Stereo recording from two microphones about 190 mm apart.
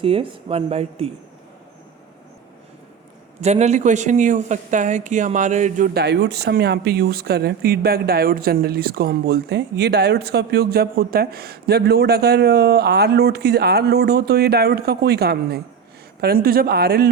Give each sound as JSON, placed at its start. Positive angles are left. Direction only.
{"t": 0.0, "sound": "speech", "side_deg": -30}
{"t": 3.4, "sound": "speech", "side_deg": -35}